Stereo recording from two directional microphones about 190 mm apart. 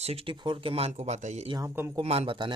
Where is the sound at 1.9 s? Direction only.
30° right (ahead or behind).